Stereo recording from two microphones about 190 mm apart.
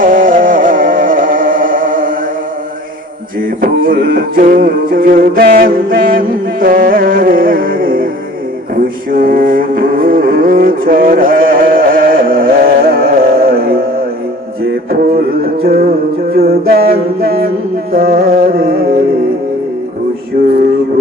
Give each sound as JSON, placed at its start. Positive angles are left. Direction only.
{"t": 0.0, "sound": "music", "side_deg": -45}
{"t": 3.6, "sound": "music", "side_deg": -50}
{"t": 14.8, "sound": "beatboxing", "side_deg": -50}
{"t": 15.6, "sound": "music", "side_deg": -50}
{"t": 20.4, "sound": "male singing", "side_deg": -45}